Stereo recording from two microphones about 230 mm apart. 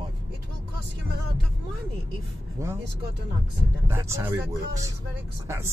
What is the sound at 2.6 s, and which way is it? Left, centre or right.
Speech, centre.